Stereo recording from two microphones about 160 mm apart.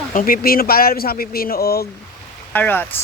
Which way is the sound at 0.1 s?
60° left (ahead or behind).